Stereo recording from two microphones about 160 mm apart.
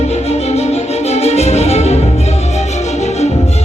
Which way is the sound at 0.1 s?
40° left (ahead or behind).